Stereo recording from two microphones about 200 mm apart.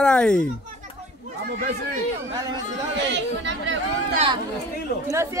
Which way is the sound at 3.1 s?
65° right (ahead or behind).